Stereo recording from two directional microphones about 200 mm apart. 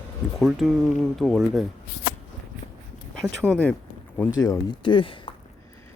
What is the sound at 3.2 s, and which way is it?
Speech, 5° left (ahead or behind).